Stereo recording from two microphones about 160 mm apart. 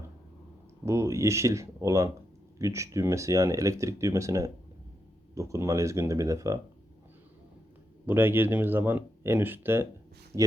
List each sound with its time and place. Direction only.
0.9 s speech: 20° right (ahead or behind)
8.0 s speech: 15° right (ahead or behind)